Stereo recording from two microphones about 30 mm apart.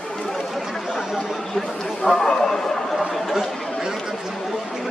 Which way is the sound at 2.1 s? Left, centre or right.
Left.